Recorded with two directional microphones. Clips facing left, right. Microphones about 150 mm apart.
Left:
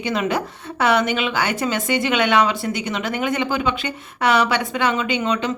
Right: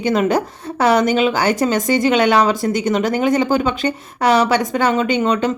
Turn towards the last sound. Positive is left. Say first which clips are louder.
# right 5 dB
turn(degrees=-45)  # may be behind; listen again after turning